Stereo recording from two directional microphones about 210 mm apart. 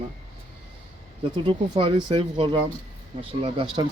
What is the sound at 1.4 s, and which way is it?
Speech, 25° right (ahead or behind).